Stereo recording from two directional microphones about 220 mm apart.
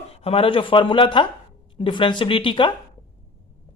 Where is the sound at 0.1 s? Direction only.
25° left (ahead or behind).